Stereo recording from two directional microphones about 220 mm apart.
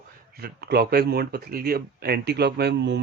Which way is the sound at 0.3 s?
45° right (ahead or behind).